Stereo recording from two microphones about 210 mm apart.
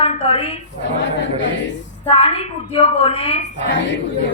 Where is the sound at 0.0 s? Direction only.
30° left (ahead or behind).